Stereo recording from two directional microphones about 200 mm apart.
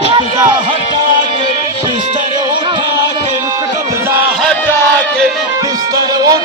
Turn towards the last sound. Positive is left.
turn(degrees=-20)  # may be behind; listen again after turning